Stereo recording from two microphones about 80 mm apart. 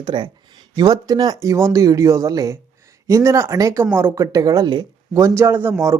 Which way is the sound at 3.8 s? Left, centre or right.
Right.